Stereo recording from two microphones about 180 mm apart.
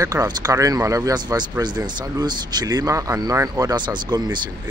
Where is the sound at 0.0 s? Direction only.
20° right (ahead or behind).